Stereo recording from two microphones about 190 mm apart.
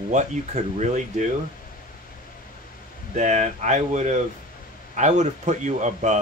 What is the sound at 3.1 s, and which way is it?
Speech, 40° right (ahead or behind).